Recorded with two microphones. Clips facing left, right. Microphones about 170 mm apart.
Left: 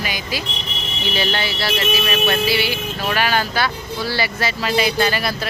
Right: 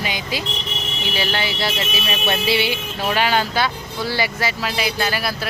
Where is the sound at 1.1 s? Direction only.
10° right (ahead or behind).